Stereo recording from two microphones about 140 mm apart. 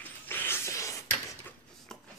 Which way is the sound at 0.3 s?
15° left (ahead or behind).